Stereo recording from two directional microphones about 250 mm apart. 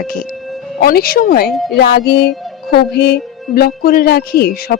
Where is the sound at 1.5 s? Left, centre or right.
Centre.